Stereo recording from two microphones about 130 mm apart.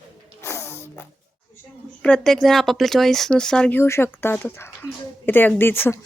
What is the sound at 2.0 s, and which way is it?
Speech, 5° left (ahead or behind).